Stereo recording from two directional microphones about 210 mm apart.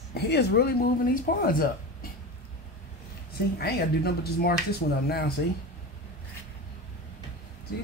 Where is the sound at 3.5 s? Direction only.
50° left (ahead or behind).